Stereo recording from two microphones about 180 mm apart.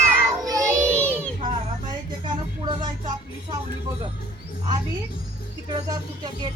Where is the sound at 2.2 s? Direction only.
25° right (ahead or behind).